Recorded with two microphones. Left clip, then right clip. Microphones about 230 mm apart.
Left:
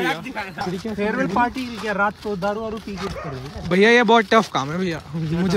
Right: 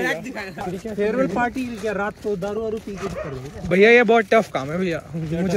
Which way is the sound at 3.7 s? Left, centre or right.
Centre.